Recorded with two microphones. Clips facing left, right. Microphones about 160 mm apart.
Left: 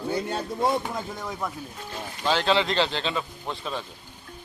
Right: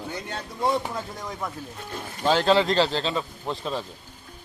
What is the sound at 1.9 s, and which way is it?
Speech, 45° right (ahead or behind).